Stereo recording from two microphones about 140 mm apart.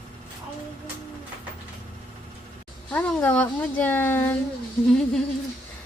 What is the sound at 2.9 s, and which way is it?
Speech, 10° left (ahead or behind).